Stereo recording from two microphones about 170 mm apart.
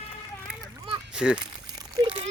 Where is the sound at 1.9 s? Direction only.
35° right (ahead or behind).